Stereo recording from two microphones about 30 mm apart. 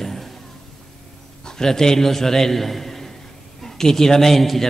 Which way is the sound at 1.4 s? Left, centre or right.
Centre.